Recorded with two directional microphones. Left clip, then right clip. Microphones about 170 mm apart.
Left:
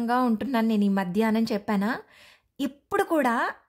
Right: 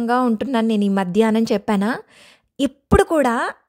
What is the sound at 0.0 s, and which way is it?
A woman's voice, 30° right (ahead or behind).